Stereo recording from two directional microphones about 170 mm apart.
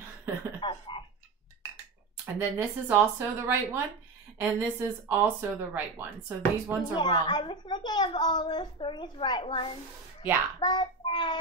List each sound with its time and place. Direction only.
0.6 s a sound: 30° left (ahead or behind)
2.3 s speech: 15° right (ahead or behind)
7.0 s a woman's voice: 25° left (ahead or behind)
10.6 s child singing: 25° left (ahead or behind)